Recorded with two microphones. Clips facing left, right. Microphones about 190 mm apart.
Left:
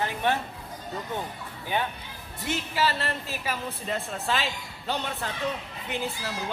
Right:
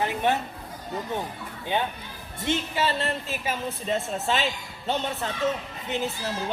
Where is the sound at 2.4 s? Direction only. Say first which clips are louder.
Right 2 dB; 25° right (ahead or behind).